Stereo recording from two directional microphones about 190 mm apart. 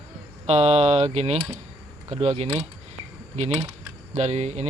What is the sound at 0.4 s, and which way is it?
Speech, 35° right (ahead or behind).